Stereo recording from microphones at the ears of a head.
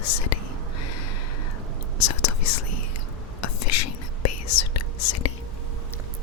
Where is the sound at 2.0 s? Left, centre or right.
Left.